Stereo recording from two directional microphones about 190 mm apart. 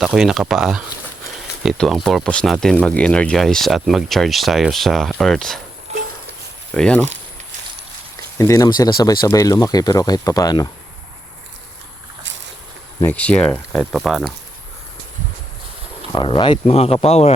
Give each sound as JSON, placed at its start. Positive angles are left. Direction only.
{"t": 0.0, "sound": "speech", "side_deg": 0}
{"t": 5.9, "sound": "a sound", "side_deg": -35}
{"t": 6.7, "sound": "speech", "side_deg": 5}
{"t": 8.4, "sound": "speech", "side_deg": 15}
{"t": 13.0, "sound": "speech", "side_deg": 10}
{"t": 16.1, "sound": "speech", "side_deg": 25}